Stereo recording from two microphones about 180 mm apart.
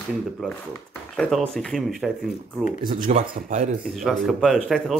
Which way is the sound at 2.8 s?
50° right (ahead or behind).